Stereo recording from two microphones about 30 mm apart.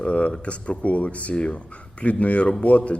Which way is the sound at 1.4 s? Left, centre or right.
Left.